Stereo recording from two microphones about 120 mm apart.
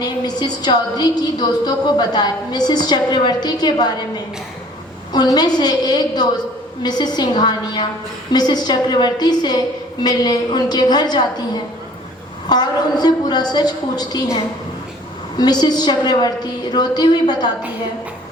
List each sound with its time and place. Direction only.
0.0 s a woman's voice: 35° left (ahead or behind)
5.1 s a woman's voice: 35° left (ahead or behind)
15.4 s a woman's voice: 35° left (ahead or behind)